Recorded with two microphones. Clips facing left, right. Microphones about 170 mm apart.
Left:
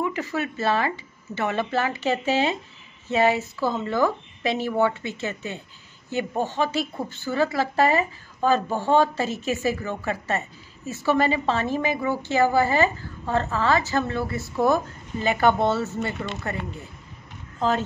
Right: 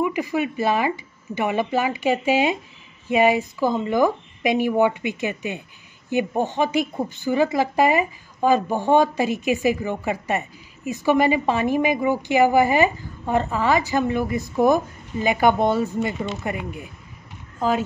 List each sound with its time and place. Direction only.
0.0 s a woman's voice: 15° right (ahead or behind)